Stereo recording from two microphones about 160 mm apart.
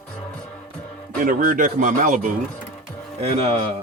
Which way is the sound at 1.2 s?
60° right (ahead or behind).